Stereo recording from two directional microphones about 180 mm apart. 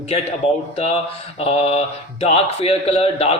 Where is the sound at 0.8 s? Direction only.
35° left (ahead or behind).